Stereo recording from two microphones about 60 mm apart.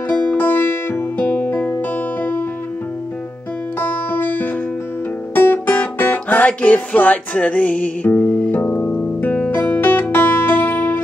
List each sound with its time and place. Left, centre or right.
0.1 s music: left
0.4 s music: left
1.2 s music: left
3.8 s music: left
8.5 s music: left